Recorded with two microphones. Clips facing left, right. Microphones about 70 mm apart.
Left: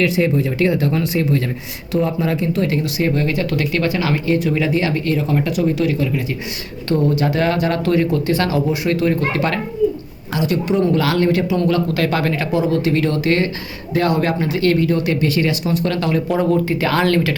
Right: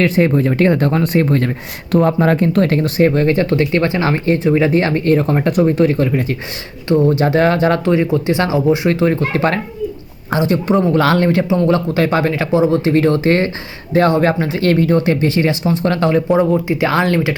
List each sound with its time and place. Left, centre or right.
0.0 s speech: right
6.8 s speech: right
16.4 s speech: centre